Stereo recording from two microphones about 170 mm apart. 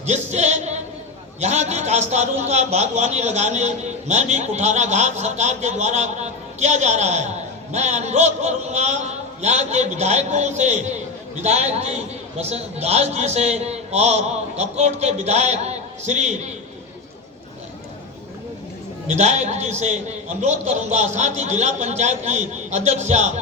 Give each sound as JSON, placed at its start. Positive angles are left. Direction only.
{"t": 0.0, "sound": "music", "side_deg": -40}
{"t": 1.4, "sound": "a man's voice", "side_deg": -40}
{"t": 19.0, "sound": "a man's voice", "side_deg": -40}